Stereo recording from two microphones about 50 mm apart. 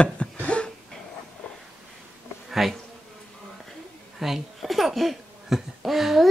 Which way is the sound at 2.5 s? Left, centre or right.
Centre.